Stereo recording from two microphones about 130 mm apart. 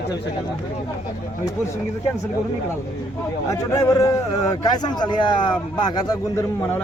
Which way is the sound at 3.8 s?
25° left (ahead or behind).